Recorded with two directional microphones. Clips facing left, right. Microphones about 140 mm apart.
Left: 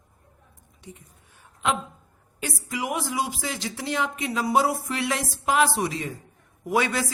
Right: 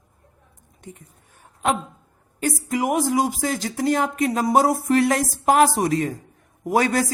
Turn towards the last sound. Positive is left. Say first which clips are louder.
# right 4 dB
turn(degrees=-45)  # may be behind; listen again after turning